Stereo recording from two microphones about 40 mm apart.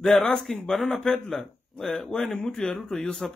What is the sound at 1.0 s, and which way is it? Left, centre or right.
Speech, centre.